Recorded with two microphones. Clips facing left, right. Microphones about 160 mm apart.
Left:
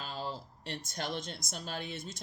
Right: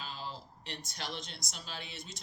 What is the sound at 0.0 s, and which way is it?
Speech, 45° left (ahead or behind).